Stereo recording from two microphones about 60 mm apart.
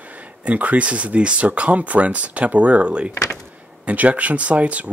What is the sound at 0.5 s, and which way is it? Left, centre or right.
Speech, right.